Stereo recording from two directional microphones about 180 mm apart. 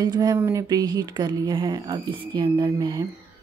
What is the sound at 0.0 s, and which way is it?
A woman's voice, 25° right (ahead or behind).